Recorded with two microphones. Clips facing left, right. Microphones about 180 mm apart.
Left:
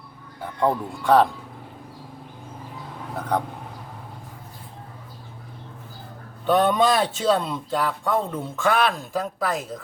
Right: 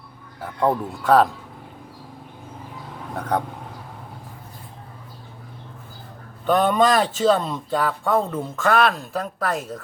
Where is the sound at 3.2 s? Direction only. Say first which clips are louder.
Right 1 dB; 5° left (ahead or behind).